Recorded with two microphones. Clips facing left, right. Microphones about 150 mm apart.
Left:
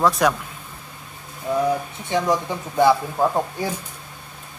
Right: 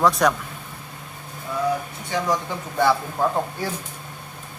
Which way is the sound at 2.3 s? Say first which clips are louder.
Left 3 dB; 15° left (ahead or behind).